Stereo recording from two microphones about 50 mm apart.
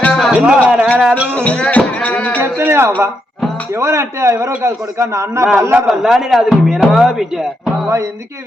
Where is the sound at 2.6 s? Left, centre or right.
Right.